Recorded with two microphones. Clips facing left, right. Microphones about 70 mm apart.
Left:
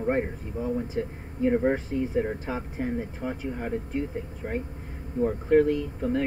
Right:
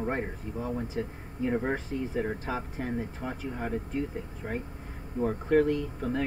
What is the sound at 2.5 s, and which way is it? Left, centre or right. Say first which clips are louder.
Speech: left 3 dB; centre.